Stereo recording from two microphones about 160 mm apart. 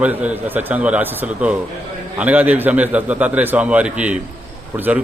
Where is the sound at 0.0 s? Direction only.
10° right (ahead or behind).